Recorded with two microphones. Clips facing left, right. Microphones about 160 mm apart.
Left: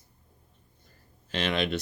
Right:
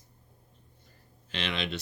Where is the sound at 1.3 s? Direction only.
45° left (ahead or behind).